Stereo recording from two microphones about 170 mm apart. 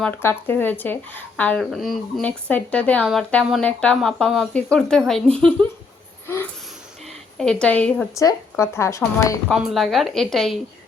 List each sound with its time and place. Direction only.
0.0 s speech: 10° left (ahead or behind)
6.2 s a sound: 15° left (ahead or behind)
7.3 s speech: 5° left (ahead or behind)
8.1 s speech: 20° left (ahead or behind)
9.5 s speech: centre (ahead or behind)